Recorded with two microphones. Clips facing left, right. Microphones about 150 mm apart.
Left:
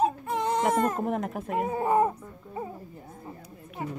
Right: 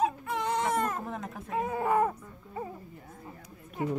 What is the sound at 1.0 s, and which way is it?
Speech, 65° left (ahead or behind).